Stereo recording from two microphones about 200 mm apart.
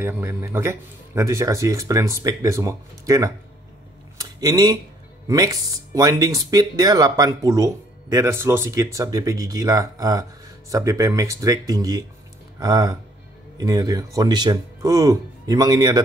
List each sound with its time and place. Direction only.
0.0 s speech: 10° right (ahead or behind)